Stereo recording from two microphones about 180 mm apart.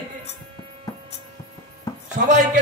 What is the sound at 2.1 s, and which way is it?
Music, 45° right (ahead or behind).